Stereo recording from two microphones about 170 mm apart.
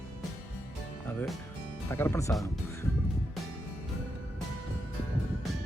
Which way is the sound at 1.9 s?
15° left (ahead or behind).